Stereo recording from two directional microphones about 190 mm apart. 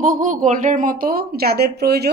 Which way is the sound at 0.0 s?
40° right (ahead or behind).